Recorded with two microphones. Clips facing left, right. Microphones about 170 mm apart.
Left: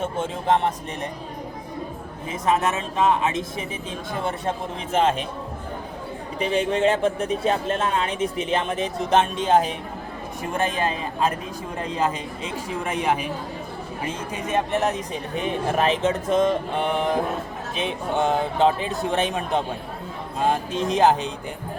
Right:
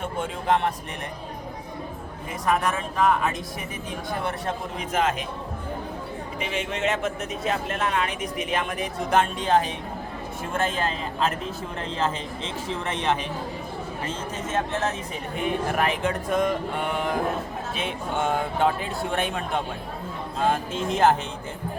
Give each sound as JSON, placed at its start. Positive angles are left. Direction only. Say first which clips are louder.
{"t": 0.0, "sound": "speech", "louder": "left 3 dB", "side_deg": 25}
{"t": 2.5, "sound": "speech", "louder": "left 2 dB", "side_deg": 25}
{"t": 6.4, "sound": "speech", "louder": "left 7 dB", "side_deg": 35}